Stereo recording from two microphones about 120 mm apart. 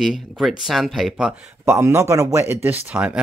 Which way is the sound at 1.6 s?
25° right (ahead or behind).